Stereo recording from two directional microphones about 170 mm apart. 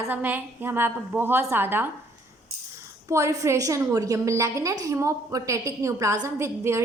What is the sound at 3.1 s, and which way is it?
A woman's voice, 15° right (ahead or behind).